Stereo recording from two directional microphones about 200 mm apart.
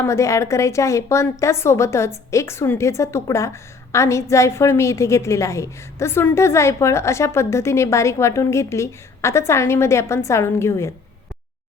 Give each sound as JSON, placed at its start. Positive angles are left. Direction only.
{"t": 0.0, "sound": "a woman's voice", "side_deg": 15}